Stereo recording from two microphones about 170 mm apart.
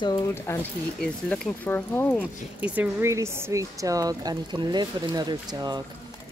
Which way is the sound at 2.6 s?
10° right (ahead or behind).